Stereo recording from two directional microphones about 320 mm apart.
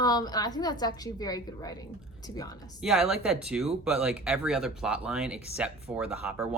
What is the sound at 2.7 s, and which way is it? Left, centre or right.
Speech, centre.